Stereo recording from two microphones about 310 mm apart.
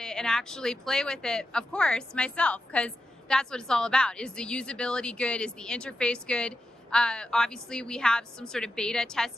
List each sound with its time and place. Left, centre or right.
0.0 s speech: centre